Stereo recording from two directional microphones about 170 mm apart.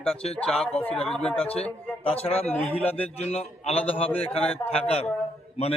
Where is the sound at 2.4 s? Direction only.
10° left (ahead or behind).